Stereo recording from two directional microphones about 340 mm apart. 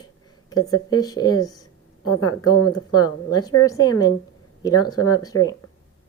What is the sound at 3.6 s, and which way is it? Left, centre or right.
A woman's voice, centre.